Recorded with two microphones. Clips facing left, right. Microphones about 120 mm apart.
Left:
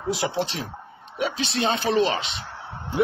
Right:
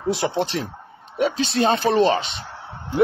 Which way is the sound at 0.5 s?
50° right (ahead or behind).